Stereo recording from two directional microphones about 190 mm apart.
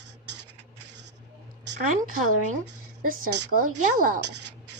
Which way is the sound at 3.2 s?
65° right (ahead or behind).